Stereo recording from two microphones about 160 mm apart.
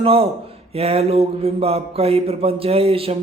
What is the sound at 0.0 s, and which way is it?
A man's voice, 35° right (ahead or behind).